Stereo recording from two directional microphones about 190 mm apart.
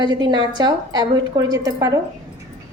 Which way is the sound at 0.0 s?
25° right (ahead or behind).